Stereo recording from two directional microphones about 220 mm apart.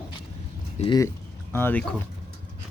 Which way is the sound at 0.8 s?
20° left (ahead or behind).